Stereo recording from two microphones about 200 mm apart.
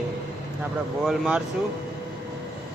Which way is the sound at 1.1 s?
5° right (ahead or behind).